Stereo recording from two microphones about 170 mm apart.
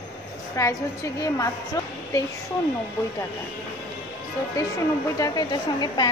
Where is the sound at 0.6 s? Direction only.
20° left (ahead or behind).